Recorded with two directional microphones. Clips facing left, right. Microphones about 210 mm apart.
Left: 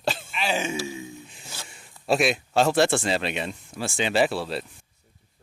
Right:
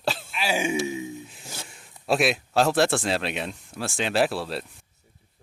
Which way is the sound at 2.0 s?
Centre (ahead or behind).